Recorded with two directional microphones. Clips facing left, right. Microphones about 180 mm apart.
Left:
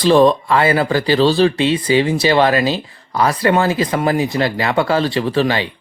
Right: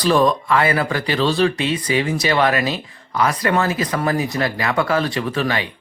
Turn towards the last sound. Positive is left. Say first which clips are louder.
# left 5 dB
turn(degrees=30)  # may be behind; listen again after turning